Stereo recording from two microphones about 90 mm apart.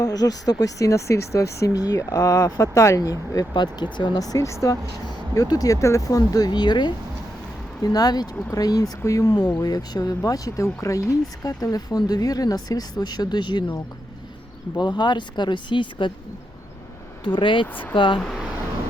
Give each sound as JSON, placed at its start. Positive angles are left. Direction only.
{"t": 0.0, "sound": "speech", "side_deg": 45}
{"t": 3.5, "sound": "speech", "side_deg": 55}
{"t": 7.8, "sound": "speech", "side_deg": 45}
{"t": 14.8, "sound": "speech", "side_deg": 55}
{"t": 17.2, "sound": "speech", "side_deg": 65}